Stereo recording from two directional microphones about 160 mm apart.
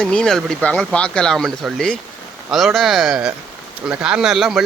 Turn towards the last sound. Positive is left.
turn(degrees=0)  # may be behind; listen again after turning